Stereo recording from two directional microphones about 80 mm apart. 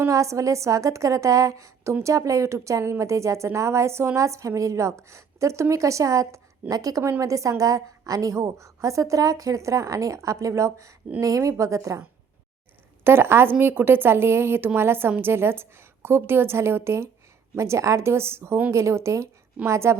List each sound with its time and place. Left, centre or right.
0.1 s a woman's voice: right
13.1 s a woman's voice: right